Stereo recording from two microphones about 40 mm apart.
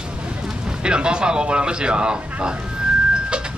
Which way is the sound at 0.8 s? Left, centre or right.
Right.